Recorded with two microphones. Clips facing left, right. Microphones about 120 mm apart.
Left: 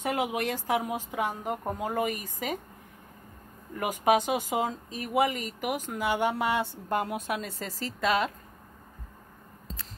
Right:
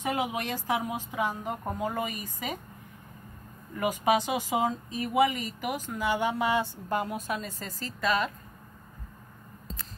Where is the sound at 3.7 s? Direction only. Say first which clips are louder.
Left 1 dB; 55° left (ahead or behind); by 8.3 s 85° left.